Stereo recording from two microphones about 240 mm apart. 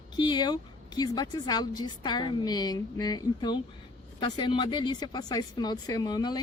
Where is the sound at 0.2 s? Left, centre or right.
Centre.